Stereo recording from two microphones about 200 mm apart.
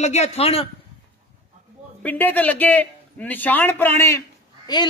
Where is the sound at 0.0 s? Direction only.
35° left (ahead or behind).